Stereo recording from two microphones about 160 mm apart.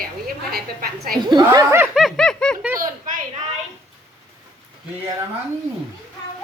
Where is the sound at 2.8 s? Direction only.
55° right (ahead or behind).